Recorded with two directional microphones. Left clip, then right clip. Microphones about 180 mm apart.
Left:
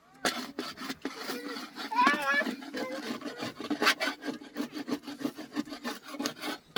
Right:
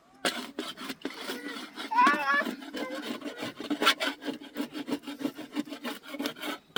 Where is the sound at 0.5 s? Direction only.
40° right (ahead or behind).